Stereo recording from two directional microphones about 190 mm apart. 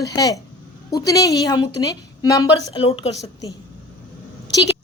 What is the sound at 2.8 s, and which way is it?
Speech, 30° left (ahead or behind).